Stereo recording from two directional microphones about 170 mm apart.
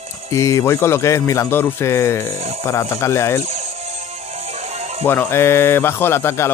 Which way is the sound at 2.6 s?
15° left (ahead or behind).